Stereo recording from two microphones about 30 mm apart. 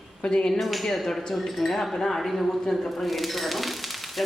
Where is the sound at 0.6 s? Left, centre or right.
Centre.